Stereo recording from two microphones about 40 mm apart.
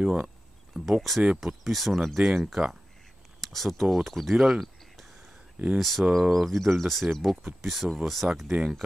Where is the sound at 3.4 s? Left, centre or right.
Centre.